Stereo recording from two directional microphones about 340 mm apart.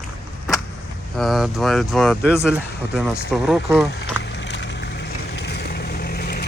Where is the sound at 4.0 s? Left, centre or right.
Left.